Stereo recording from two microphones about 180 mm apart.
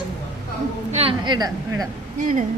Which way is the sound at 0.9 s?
30° right (ahead or behind).